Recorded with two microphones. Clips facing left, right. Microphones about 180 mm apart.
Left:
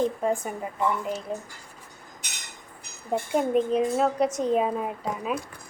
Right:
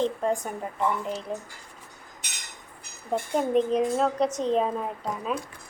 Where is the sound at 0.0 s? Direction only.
5° left (ahead or behind).